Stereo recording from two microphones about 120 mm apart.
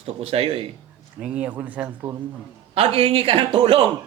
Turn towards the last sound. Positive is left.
turn(degrees=-50)  # may be behind; listen again after turning